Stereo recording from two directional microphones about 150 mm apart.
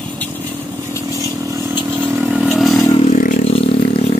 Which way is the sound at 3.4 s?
40° left (ahead or behind).